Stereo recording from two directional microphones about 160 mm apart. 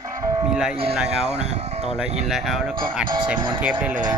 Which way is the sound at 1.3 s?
40° right (ahead or behind).